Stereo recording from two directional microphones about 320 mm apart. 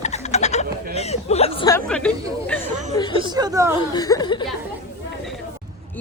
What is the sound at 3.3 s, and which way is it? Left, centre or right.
Speech, centre.